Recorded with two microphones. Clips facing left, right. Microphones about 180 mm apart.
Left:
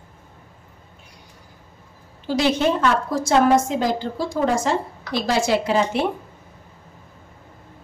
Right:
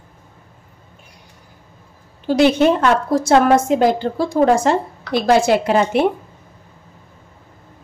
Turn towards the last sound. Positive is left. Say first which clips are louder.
# right 4 dB
turn(degrees=-60)  # may be behind; listen again after turning